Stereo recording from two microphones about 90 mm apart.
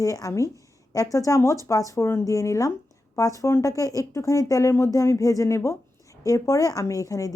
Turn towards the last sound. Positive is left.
turn(degrees=40)  # may be behind; listen again after turning